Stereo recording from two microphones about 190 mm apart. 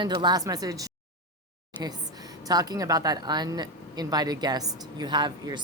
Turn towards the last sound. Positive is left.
turn(degrees=-20)  # may be behind; listen again after turning